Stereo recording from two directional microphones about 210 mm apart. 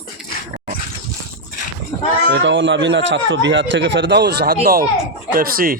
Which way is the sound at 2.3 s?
60° right (ahead or behind).